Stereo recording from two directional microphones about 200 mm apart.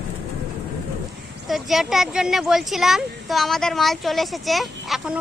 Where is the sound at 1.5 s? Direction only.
Centre (ahead or behind).